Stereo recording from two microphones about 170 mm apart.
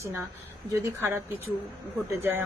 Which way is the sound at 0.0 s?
15° right (ahead or behind).